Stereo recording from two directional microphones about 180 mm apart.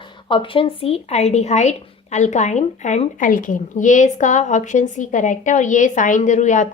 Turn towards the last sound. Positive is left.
turn(degrees=40)  # may be behind; listen again after turning